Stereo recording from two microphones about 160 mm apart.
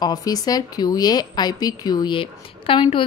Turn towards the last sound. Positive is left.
turn(degrees=35)  # may be behind; listen again after turning